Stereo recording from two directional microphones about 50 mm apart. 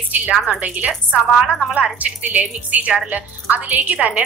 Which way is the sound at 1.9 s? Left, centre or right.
Right.